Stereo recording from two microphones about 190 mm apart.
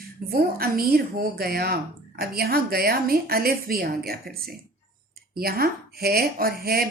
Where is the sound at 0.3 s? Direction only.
50° right (ahead or behind).